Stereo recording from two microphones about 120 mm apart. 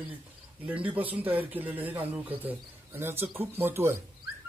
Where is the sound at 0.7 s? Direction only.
15° right (ahead or behind).